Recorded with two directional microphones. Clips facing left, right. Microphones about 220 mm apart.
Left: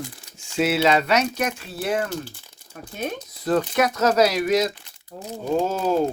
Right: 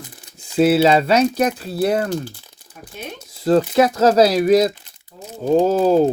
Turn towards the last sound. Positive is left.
turn(degrees=-35)  # may be behind; listen again after turning